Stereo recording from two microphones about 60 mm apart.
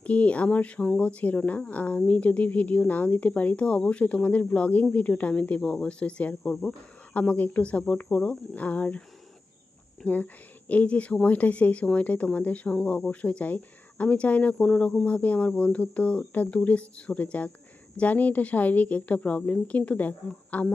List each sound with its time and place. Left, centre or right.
0.0 s speech: left
6.4 s speech: centre
7.1 s speech: left
10.7 s speech: left
12.7 s speech: centre
13.1 s speech: left
14.6 s speech: centre